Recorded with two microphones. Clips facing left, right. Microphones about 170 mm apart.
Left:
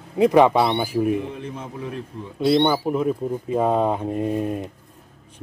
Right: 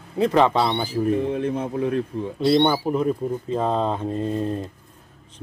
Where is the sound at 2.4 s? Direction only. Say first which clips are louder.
Even; centre (ahead or behind).